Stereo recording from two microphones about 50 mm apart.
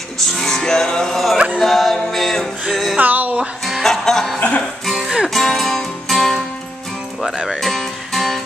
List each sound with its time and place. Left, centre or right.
0.2 s music: centre
3.0 s music: right
3.6 s music: centre
4.4 s music: left
4.8 s music: centre